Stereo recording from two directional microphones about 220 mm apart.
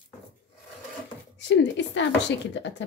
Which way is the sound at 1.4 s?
50° left (ahead or behind).